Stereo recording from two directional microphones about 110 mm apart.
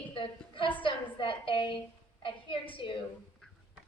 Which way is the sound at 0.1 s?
50° left (ahead or behind).